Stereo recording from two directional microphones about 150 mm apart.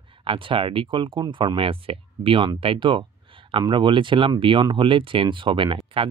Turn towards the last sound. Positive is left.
turn(degrees=-35)  # may be behind; listen again after turning